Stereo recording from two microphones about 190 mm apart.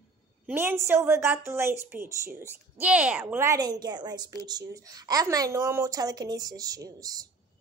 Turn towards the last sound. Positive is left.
turn(degrees=-20)  # may be behind; listen again after turning